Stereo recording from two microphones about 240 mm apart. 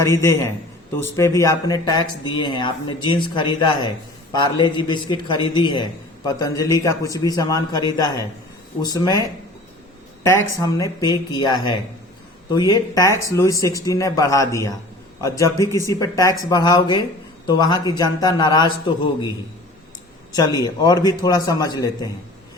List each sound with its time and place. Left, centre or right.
0.1 s speech: centre
10.2 s speech: centre
20.3 s speech: centre